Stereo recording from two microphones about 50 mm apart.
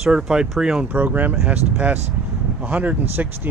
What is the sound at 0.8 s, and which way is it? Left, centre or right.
Speech, right.